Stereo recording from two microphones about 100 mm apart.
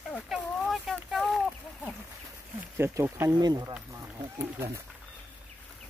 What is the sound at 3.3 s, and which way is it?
Speech, 40° right (ahead or behind).